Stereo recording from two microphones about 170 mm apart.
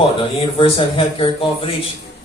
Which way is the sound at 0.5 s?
30° left (ahead or behind).